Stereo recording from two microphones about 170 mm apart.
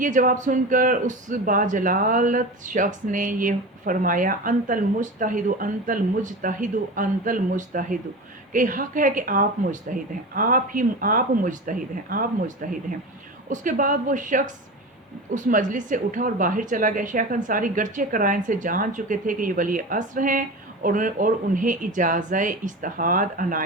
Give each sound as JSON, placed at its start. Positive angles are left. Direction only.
{"t": 0.0, "sound": "a man's voice", "side_deg": -50}